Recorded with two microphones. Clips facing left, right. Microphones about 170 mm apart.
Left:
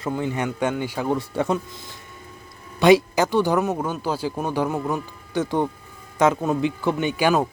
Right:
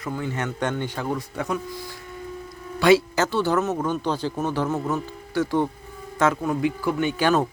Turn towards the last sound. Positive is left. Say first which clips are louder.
# left 1 dB
turn(degrees=10)  # may be behind; listen again after turning